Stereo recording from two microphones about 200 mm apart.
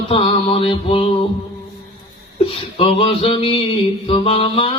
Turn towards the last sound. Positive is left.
turn(degrees=25)  # may be behind; listen again after turning